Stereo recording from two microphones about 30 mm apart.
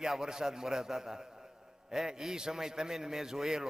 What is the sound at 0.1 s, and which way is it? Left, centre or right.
A man's voice, centre.